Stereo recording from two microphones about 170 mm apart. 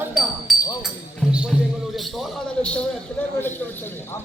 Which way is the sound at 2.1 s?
5° left (ahead or behind).